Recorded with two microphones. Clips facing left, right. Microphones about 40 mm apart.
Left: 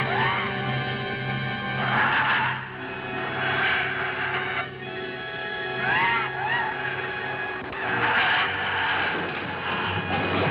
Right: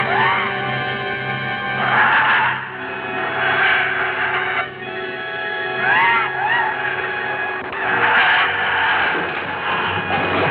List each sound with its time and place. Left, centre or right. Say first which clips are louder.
0.0 s music: right 7 dB; right
1.8 s music: right 8 dB; right
3.3 s gong: right 8 dB; right
5.8 s music: right 8 dB; right
7.8 s skidding: right 8 dB; right
9.7 s a sound: right 7 dB; right